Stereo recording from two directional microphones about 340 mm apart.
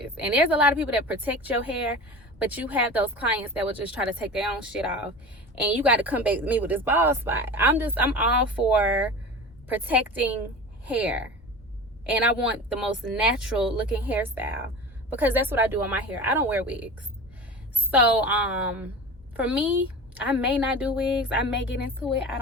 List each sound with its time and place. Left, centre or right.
0.0 s a woman's voice: centre
17.9 s a woman's voice: centre